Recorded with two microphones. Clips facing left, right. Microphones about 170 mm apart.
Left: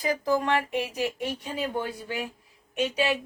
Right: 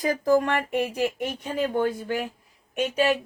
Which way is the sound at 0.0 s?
45° right (ahead or behind).